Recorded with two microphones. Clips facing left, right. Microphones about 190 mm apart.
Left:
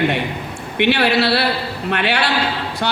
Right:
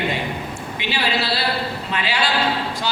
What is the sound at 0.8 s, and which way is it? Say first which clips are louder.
A man's voice: left 9 dB; 65° left (ahead or behind).